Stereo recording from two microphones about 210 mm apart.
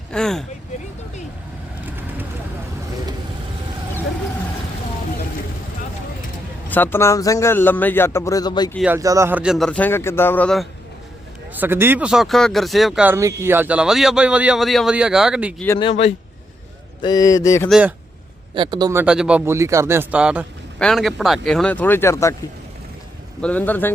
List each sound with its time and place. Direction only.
0.1 s speech: centre (ahead or behind)
6.7 s a man's voice: 10° left (ahead or behind)
8.8 s speech: 10° right (ahead or behind); by 10.7 s 5° left (ahead or behind)
11.5 s speech: 10° right (ahead or behind)
15.8 s speech: 30° left (ahead or behind)
17.0 s a man's voice: 20° left (ahead or behind)
17.7 s speech: 5° right (ahead or behind)
18.5 s speech: 20° right (ahead or behind); by 22.4 s 15° left (ahead or behind)
23.4 s a man's voice: 5° left (ahead or behind)